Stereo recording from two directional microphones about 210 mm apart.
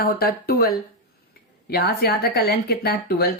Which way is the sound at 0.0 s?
45° left (ahead or behind).